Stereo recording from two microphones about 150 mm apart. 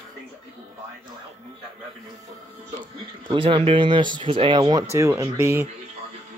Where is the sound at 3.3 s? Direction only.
35° right (ahead or behind).